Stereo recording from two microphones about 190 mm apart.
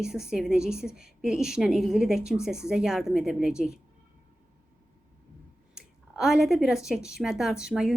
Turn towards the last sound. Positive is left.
turn(degrees=-5)  # may be behind; listen again after turning